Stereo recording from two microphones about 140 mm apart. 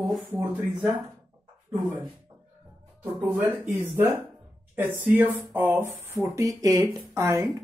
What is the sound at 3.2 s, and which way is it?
Speech, 15° right (ahead or behind).